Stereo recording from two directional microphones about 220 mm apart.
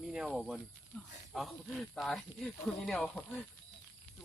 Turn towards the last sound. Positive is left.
turn(degrees=5)  # may be behind; listen again after turning